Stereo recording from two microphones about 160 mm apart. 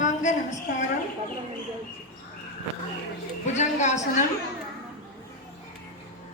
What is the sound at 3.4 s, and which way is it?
Speech, 45° left (ahead or behind).